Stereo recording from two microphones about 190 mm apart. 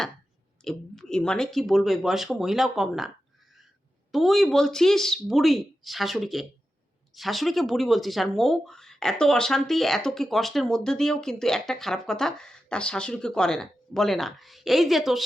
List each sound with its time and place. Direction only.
0.6 s speech: 5° left (ahead or behind)
4.1 s speech: centre (ahead or behind)